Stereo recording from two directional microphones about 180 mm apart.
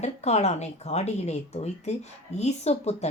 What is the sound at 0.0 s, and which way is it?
Speech, 35° left (ahead or behind).